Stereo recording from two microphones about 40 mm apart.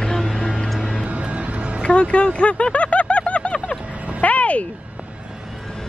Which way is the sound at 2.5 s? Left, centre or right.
Left.